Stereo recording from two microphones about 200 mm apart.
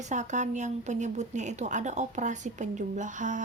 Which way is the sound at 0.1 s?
35° right (ahead or behind).